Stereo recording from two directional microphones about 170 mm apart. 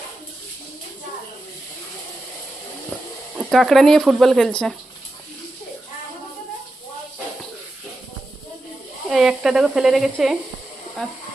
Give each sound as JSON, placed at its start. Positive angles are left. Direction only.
{"t": 3.3, "sound": "speech", "side_deg": 0}
{"t": 9.0, "sound": "speech", "side_deg": 0}